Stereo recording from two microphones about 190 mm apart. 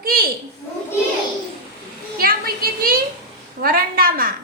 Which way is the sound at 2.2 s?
50° right (ahead or behind).